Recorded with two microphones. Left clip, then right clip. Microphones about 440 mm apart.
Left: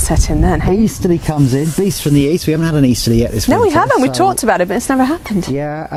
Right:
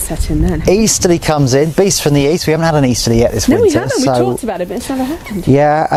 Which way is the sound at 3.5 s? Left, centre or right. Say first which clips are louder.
Left 5 dB; left.